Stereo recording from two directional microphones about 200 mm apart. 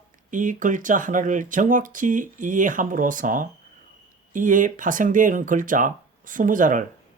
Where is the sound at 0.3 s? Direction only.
40° right (ahead or behind).